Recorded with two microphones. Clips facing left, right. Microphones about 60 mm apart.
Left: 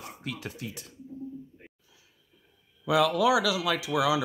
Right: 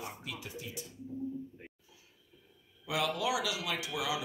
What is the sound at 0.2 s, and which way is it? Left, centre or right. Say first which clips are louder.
Speech: left 6 dB; left.